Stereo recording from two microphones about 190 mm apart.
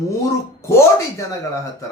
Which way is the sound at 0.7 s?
15° left (ahead or behind).